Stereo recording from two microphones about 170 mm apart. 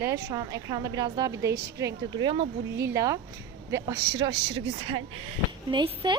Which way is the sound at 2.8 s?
20° right (ahead or behind).